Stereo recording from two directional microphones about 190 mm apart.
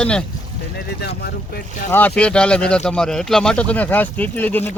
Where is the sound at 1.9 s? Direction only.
10° left (ahead or behind).